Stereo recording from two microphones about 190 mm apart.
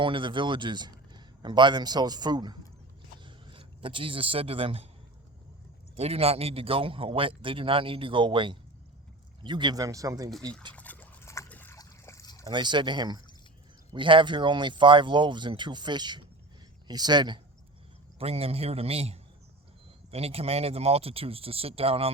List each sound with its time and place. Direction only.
0.0 s a man's voice: 25° right (ahead or behind)
6.0 s a man's voice: 30° right (ahead or behind)
10.8 s dog: 10° left (ahead or behind)
12.5 s a man's voice: 25° right (ahead or behind)